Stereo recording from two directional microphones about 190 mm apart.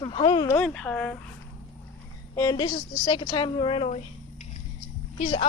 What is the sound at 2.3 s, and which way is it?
A woman's voice, 20° left (ahead or behind).